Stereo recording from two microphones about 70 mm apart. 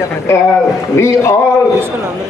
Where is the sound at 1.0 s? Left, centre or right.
Left.